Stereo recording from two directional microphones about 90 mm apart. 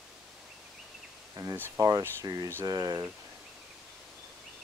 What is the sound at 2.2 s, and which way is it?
Speech, 40° right (ahead or behind).